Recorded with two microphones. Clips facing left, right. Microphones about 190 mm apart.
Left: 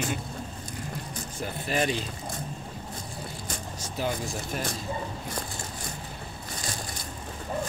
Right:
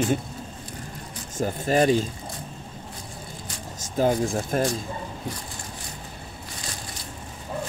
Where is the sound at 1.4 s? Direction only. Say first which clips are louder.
Right 8 dB; 45° right (ahead or behind).